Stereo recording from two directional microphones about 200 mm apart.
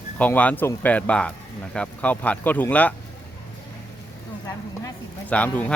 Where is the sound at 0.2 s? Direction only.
5° left (ahead or behind).